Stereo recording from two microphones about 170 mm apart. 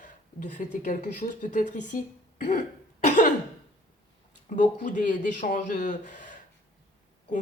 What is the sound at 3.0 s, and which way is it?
Cough, 45° left (ahead or behind).